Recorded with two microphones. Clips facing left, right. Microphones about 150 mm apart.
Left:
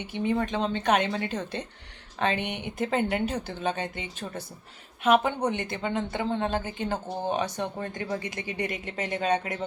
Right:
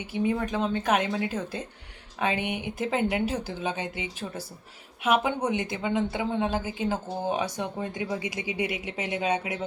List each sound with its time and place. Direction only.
0.0 s a woman's voice: 5° right (ahead or behind)